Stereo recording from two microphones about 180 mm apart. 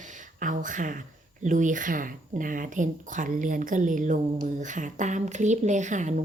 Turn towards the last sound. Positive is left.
turn(degrees=-40)  # may be behind; listen again after turning